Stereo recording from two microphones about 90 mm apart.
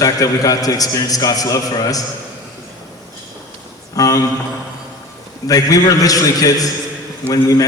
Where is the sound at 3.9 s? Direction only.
45° left (ahead or behind).